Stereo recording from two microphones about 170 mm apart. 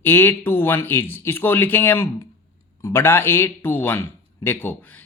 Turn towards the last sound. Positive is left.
turn(degrees=10)  # may be behind; listen again after turning